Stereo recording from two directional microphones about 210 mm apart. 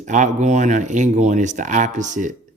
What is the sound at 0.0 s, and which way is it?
Speech, 35° right (ahead or behind).